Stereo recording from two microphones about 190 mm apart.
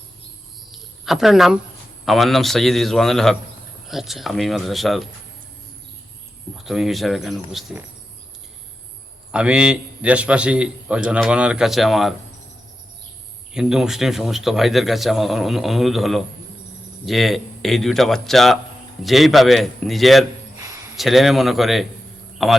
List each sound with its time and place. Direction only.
0.7 s a sound: centre (ahead or behind)
2.0 s a man's voice: centre (ahead or behind)
6.7 s a man's voice: centre (ahead or behind)
9.3 s a man's voice: 5° right (ahead or behind)
13.5 s a man's voice: 5° right (ahead or behind)
20.6 s a sound: 15° right (ahead or behind)
20.9 s a man's voice: centre (ahead or behind)